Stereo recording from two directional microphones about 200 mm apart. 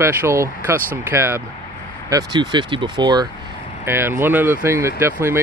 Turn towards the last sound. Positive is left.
turn(degrees=-10)  # may be behind; listen again after turning